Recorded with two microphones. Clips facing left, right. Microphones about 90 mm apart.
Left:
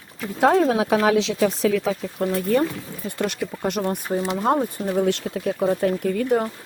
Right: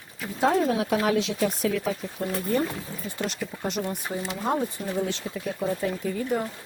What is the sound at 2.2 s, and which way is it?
Speech, 65° left (ahead or behind).